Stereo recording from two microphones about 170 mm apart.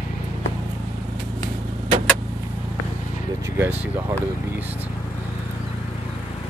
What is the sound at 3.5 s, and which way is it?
Speech, 15° right (ahead or behind).